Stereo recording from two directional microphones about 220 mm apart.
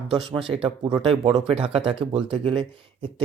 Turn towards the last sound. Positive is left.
turn(degrees=-20)  # may be behind; listen again after turning